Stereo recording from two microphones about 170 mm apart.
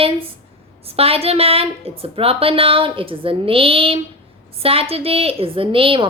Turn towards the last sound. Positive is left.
turn(degrees=-30)  # may be behind; listen again after turning